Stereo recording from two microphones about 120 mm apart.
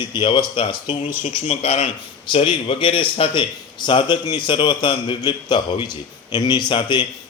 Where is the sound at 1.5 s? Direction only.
60° left (ahead or behind).